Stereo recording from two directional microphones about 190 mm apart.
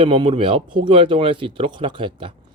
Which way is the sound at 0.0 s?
25° right (ahead or behind).